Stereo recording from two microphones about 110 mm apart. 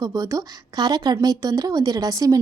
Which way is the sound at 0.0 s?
30° right (ahead or behind).